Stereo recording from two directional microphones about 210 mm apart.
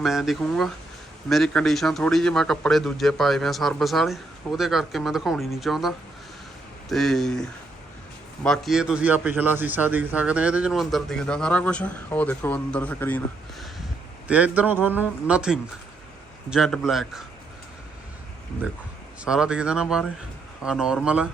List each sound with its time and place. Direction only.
0.0 s a man's voice: centre (ahead or behind)
8.4 s a man's voice: centre (ahead or behind)
14.3 s a man's voice: 5° right (ahead or behind)
19.2 s a man's voice: 5° right (ahead or behind)